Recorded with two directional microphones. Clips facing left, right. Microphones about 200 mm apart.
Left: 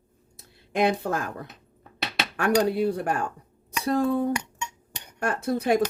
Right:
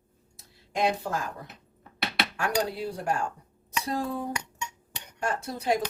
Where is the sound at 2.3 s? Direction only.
60° left (ahead or behind).